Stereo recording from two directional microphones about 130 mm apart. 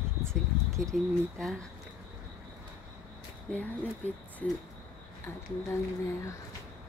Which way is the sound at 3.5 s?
10° left (ahead or behind).